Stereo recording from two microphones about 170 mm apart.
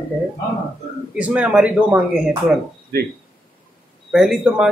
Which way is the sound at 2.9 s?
65° right (ahead or behind).